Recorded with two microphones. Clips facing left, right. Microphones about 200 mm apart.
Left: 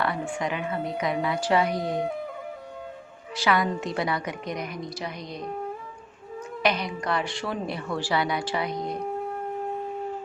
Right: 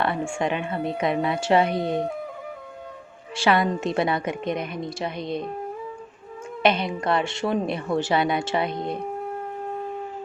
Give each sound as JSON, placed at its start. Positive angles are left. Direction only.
{"t": 0.0, "sound": "a woman's voice", "side_deg": -25}
{"t": 3.3, "sound": "a woman's voice", "side_deg": -25}
{"t": 6.6, "sound": "a woman's voice", "side_deg": -25}